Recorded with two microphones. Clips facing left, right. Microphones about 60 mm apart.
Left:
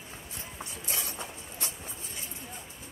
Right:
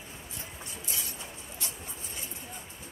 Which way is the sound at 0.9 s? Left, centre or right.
Left.